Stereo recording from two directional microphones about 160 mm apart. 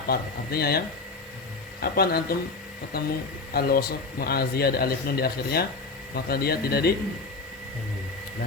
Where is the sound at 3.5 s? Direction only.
75° left (ahead or behind).